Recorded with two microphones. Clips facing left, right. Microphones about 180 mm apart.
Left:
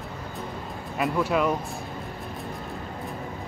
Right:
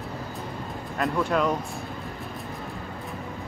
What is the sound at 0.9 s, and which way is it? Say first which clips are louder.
Speech: even; 5° left (ahead or behind).